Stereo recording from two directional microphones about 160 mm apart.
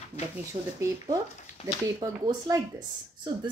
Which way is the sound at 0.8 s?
20° right (ahead or behind).